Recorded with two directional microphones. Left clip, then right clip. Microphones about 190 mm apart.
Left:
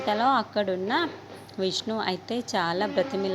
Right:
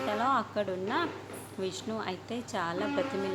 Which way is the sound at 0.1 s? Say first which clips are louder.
Left 7 dB; 30° left (ahead or behind).